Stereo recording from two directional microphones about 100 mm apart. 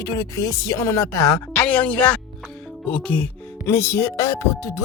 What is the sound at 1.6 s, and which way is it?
Speech, 15° left (ahead or behind).